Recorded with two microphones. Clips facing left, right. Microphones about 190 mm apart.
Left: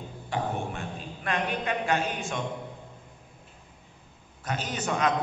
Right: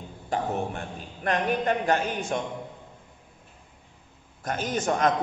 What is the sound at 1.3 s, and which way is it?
Speech, 45° right (ahead or behind).